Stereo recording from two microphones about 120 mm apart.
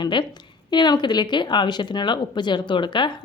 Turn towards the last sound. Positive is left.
turn(degrees=40)  # may be behind; listen again after turning